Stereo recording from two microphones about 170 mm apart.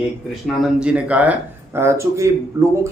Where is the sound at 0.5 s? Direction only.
5° right (ahead or behind).